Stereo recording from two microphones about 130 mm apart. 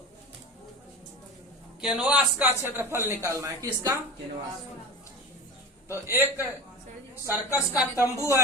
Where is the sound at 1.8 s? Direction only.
5° right (ahead or behind); by 3.6 s 25° right (ahead or behind).